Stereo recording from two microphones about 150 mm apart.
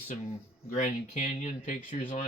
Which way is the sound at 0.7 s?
55° left (ahead or behind).